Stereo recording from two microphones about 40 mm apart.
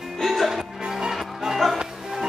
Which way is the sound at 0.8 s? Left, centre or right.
Right.